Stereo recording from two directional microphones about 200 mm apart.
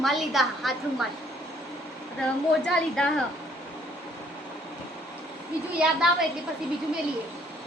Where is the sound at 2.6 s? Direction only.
5° left (ahead or behind).